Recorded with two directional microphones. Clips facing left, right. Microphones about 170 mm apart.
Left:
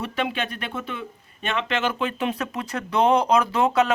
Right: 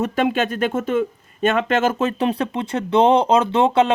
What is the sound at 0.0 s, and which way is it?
Speech, 45° right (ahead or behind).